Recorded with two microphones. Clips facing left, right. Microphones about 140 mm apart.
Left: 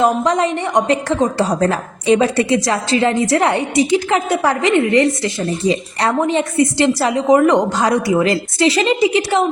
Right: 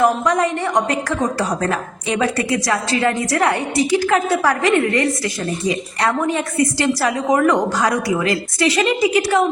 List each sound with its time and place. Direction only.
0.0 s a woman's voice: 25° left (ahead or behind)